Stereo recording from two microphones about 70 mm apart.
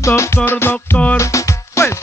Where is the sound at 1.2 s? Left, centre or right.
Left.